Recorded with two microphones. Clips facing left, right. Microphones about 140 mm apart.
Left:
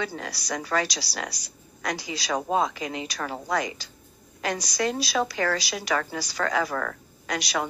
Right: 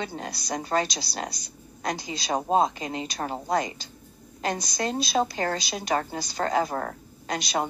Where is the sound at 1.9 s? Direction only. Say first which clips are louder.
Left 1 dB; 50° right (ahead or behind).